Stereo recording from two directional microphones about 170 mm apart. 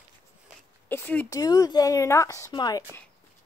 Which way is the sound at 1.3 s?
20° left (ahead or behind).